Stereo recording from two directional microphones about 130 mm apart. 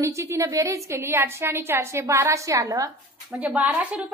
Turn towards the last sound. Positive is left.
turn(degrees=-10)  # may be behind; listen again after turning